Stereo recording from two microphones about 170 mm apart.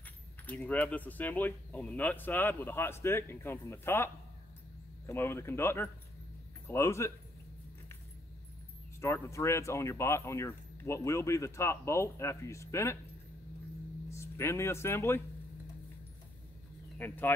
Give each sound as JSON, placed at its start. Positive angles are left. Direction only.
{"t": 0.5, "sound": "speech", "side_deg": 10}
{"t": 9.0, "sound": "speech", "side_deg": 15}
{"t": 14.1, "sound": "speech", "side_deg": 15}
{"t": 17.0, "sound": "speech", "side_deg": 10}